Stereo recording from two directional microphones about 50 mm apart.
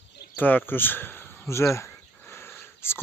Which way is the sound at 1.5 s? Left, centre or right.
Left.